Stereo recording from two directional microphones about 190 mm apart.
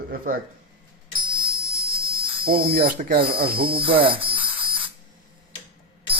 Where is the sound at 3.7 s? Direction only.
30° right (ahead or behind).